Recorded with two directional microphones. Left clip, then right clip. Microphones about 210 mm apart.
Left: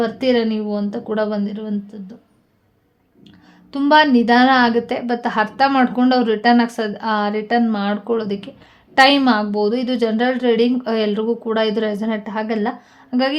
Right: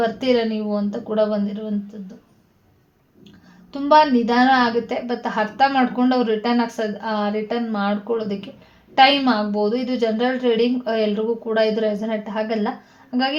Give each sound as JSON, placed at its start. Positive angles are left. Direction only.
{"t": 0.0, "sound": "a woman's voice", "side_deg": 30}
{"t": 3.7, "sound": "a woman's voice", "side_deg": 35}